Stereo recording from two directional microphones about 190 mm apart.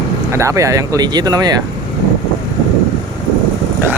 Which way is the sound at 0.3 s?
15° right (ahead or behind).